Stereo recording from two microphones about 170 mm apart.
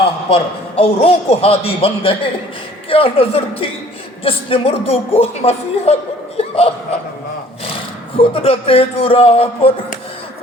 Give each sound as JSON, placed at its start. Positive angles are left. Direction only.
{"t": 0.3, "sound": "speech", "side_deg": 35}
{"t": 8.3, "sound": "speech", "side_deg": 35}